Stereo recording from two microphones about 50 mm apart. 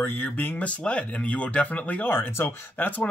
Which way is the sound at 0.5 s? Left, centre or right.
Left.